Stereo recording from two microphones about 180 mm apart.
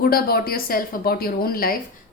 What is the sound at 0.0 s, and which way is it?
A woman's voice, 55° left (ahead or behind).